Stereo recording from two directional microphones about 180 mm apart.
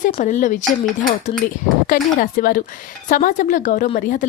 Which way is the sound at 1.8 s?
50° left (ahead or behind).